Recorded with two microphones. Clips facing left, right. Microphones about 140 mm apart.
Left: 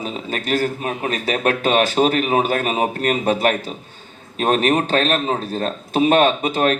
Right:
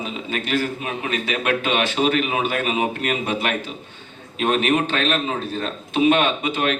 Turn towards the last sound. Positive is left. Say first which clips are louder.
# left 5 dB
turn(degrees=40)  # may be behind; listen again after turning